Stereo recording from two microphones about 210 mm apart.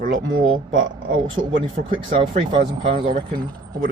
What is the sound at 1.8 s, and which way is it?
Speech, 45° right (ahead or behind).